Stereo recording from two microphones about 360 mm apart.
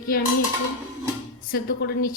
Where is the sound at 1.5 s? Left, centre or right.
Left.